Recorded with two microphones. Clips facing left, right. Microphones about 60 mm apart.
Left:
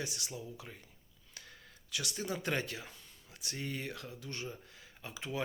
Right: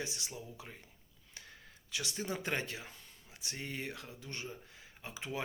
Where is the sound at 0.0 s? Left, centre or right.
Right.